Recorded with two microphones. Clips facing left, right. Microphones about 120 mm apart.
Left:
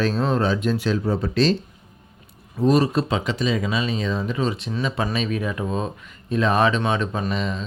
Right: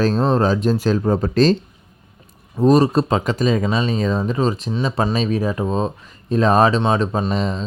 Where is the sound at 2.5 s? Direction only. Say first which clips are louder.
Right 4 dB; 40° right (ahead or behind).